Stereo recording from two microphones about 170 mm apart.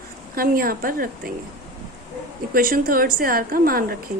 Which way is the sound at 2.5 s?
55° right (ahead or behind).